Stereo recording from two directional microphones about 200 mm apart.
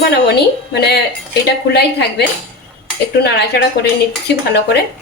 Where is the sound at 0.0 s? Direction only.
55° left (ahead or behind).